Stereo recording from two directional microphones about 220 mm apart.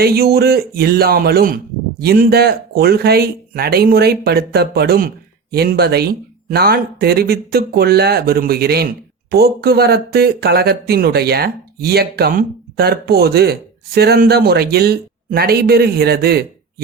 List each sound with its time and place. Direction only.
0.0 s speech: 45° right (ahead or behind)